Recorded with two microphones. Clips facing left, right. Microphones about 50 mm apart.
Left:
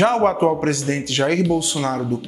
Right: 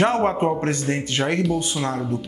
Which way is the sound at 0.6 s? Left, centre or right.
Centre.